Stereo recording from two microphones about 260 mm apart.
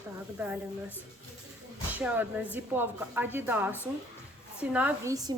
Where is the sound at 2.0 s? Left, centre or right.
Centre.